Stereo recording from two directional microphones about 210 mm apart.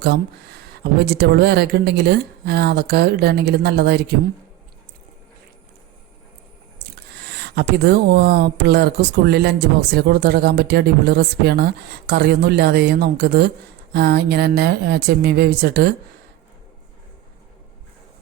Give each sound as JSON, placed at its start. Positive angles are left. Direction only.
{"t": 0.0, "sound": "speech", "side_deg": -50}
{"t": 6.9, "sound": "speech", "side_deg": -50}